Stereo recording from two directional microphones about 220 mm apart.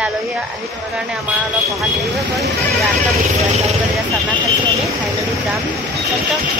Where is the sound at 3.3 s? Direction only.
30° right (ahead or behind).